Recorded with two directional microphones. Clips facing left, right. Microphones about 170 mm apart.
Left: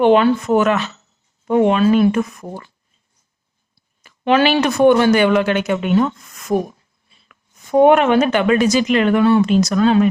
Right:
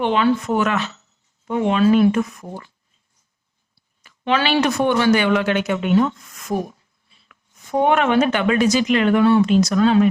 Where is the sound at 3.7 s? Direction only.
50° left (ahead or behind).